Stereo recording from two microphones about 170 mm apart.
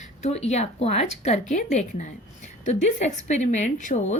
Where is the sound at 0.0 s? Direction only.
40° left (ahead or behind).